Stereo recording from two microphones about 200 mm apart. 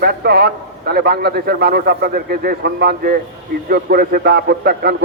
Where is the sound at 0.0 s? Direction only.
50° right (ahead or behind).